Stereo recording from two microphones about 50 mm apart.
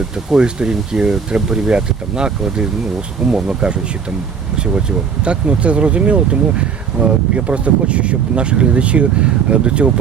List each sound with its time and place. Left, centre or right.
0.3 s speech: centre